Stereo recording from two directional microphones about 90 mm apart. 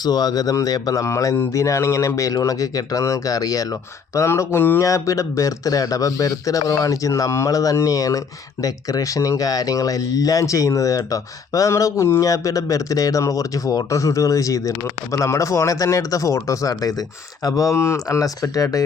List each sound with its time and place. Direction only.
0.0 s speech: 50° left (ahead or behind); by 4.8 s 25° left (ahead or behind)
4.8 s speech: 35° left (ahead or behind)